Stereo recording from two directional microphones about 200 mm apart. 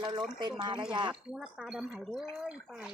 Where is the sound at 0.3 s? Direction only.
20° right (ahead or behind).